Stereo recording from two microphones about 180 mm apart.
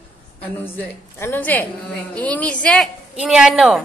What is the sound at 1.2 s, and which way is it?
A woman's voice, 10° left (ahead or behind).